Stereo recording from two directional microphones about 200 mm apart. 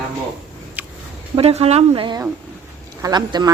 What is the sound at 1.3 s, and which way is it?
Speech, 30° right (ahead or behind).